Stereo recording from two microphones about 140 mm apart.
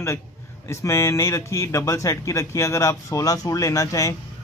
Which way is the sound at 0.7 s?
20° left (ahead or behind).